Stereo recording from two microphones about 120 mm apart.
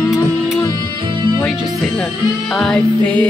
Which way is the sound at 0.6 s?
25° left (ahead or behind).